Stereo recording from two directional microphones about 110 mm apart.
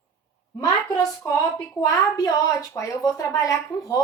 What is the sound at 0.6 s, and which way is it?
A woman's voice, 30° left (ahead or behind).